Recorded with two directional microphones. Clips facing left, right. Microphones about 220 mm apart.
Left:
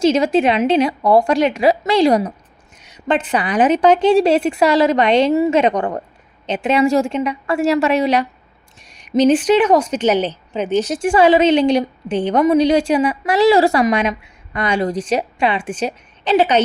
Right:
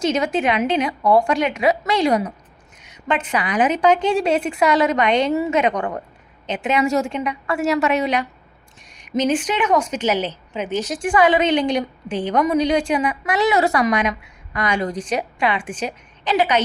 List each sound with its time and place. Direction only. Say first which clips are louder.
0.0 s a woman's voice: left 6 dB; 25° left (ahead or behind)